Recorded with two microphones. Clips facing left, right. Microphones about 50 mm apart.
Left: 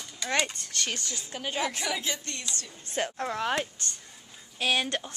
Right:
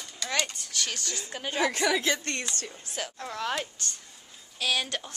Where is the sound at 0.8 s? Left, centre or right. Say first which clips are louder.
Left 2 dB; left.